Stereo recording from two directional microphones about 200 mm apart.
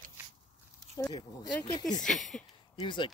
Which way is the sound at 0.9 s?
15° left (ahead or behind).